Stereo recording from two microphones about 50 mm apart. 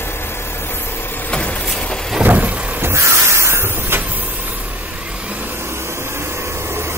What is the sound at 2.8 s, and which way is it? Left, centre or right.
Crow, right.